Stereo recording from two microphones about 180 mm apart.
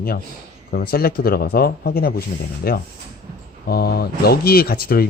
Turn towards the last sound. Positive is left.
turn(degrees=55)  # may be behind; listen again after turning